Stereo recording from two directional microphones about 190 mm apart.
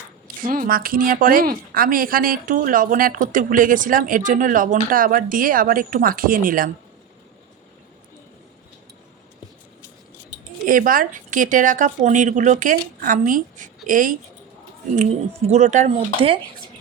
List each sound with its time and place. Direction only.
0.4 s a woman's voice: 50° right (ahead or behind)
10.7 s a woman's voice: 45° right (ahead or behind)
14.9 s speech: 35° right (ahead or behind)